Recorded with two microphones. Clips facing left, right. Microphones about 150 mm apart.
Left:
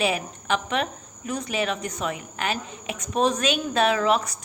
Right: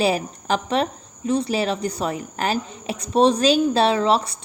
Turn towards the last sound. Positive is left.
turn(degrees=-30)  # may be behind; listen again after turning